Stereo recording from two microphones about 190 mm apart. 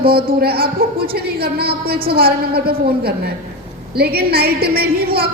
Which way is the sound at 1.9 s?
55° right (ahead or behind).